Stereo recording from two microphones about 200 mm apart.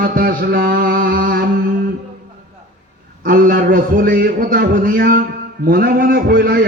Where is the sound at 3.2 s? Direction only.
45° right (ahead or behind).